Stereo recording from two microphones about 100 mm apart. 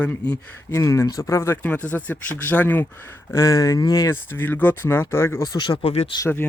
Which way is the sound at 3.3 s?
30° left (ahead or behind).